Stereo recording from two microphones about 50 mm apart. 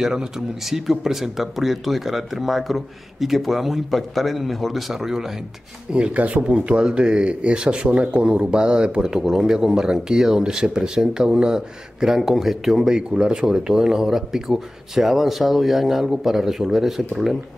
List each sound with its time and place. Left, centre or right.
0.0 s speech: centre
5.9 s speech: right; by 17.4 s centre